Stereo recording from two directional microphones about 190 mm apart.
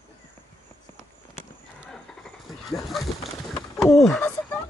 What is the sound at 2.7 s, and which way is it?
Speech, centre (ahead or behind).